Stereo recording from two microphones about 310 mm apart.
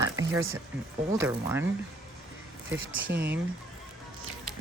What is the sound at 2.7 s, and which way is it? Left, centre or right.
Speech, right.